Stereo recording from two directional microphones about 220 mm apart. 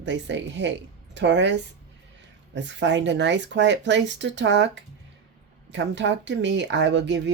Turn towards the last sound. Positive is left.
turn(degrees=-55)  # may be behind; listen again after turning